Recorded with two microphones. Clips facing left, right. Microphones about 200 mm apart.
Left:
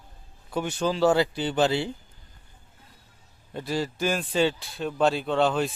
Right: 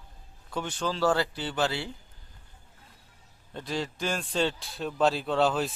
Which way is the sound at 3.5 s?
5° left (ahead or behind).